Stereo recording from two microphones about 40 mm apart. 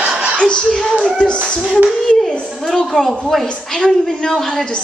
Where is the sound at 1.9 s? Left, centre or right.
Centre.